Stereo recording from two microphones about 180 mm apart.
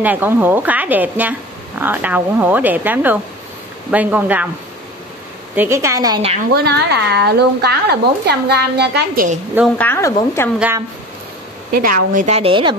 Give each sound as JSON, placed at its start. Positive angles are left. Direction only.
{"t": 0.0, "sound": "speech", "side_deg": -10}
{"t": 5.6, "sound": "speech", "side_deg": -15}
{"t": 6.5, "sound": "a woman's voice", "side_deg": -65}
{"t": 9.8, "sound": "speech", "side_deg": 15}
{"t": 11.7, "sound": "a woman's voice", "side_deg": -50}
{"t": 12.4, "sound": "speech", "side_deg": -30}